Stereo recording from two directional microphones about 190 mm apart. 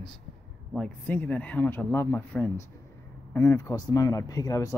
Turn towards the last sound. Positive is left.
turn(degrees=15)  # may be behind; listen again after turning